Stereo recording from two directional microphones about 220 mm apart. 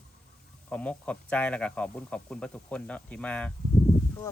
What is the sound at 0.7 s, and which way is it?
Speech, 5° left (ahead or behind).